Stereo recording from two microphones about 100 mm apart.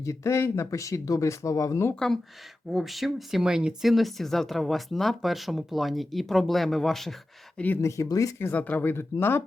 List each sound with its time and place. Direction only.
0.0 s speech: 30° left (ahead or behind)
2.7 s speech: centre (ahead or behind)
7.8 s speech: 30° left (ahead or behind)
8.4 s speech: 20° left (ahead or behind)